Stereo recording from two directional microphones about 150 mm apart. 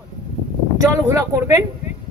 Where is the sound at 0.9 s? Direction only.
20° right (ahead or behind).